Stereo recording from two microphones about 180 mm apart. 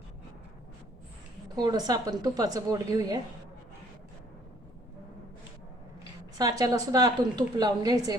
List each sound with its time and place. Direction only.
1.5 s a woman's voice: 25° right (ahead or behind)
6.3 s a woman's voice: 20° right (ahead or behind)